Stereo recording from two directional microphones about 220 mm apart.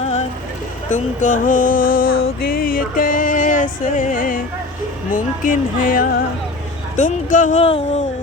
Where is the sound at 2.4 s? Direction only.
40° left (ahead or behind).